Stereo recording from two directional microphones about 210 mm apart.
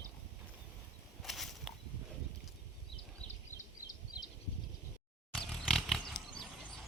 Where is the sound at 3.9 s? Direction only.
20° left (ahead or behind).